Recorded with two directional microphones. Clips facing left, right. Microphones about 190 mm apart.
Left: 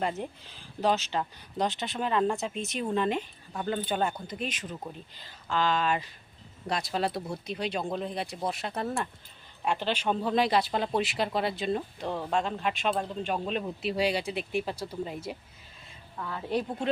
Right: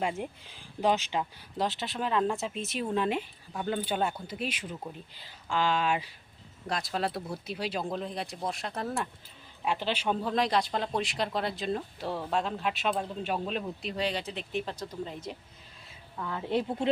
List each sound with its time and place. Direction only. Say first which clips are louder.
0.0 s speech: left 1 dB; 10° right (ahead or behind)
1.5 s speech: left 1 dB; centre (ahead or behind)
6.7 s speech: left 2 dB; centre (ahead or behind)
15.9 s a sound: right 1 dB; 5° right (ahead or behind)
16.3 s a woman's voice: right 1 dB; 20° right (ahead or behind)